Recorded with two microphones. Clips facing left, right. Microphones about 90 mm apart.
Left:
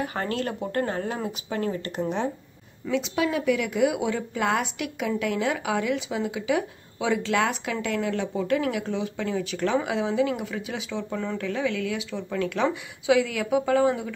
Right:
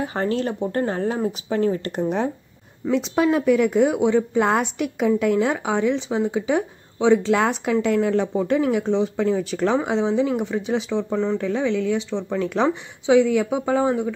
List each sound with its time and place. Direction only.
0.0 s speech: 30° right (ahead or behind)
4.0 s speech: 25° right (ahead or behind)
4.4 s speech: 40° right (ahead or behind)
7.3 s speech: 40° right (ahead or behind); by 14.1 s 15° right (ahead or behind)